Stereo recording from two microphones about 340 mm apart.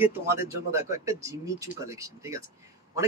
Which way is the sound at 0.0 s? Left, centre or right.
Centre.